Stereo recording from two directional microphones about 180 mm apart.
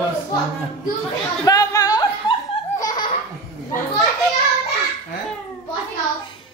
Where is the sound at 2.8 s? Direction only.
20° left (ahead or behind).